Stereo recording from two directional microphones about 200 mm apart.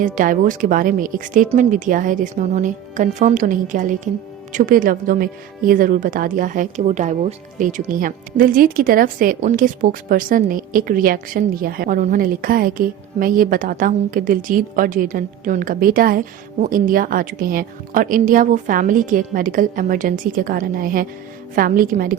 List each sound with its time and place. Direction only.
0.0 s a woman's voice: 40° right (ahead or behind)